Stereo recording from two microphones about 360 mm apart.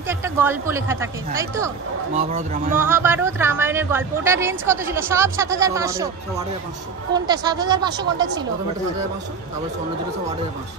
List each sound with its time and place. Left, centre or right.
0.1 s speech: centre
2.1 s a man's voice: centre
2.8 s speech: centre